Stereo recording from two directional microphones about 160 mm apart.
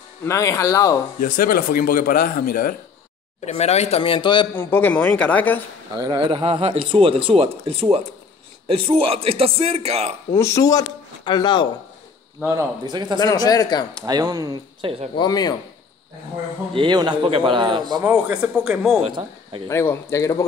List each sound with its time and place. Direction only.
0.2 s speech: 15° left (ahead or behind)
1.2 s speech: 60° left (ahead or behind)
3.4 s a man's voice: 45° left (ahead or behind)
4.6 s speech: 15° left (ahead or behind)
5.9 s speech: 30° right (ahead or behind)
10.3 s speech: 20° left (ahead or behind)
12.4 s a man's voice: 15° right (ahead or behind)
13.2 s speech: 25° left (ahead or behind)
13.9 s a man's voice: 25° right (ahead or behind)
15.1 s speech: 25° left (ahead or behind)
16.7 s a man's voice: 30° right (ahead or behind)
18.0 s speech: 10° right (ahead or behind)
19.0 s speech: 35° right (ahead or behind)
19.7 s speech: 15° left (ahead or behind)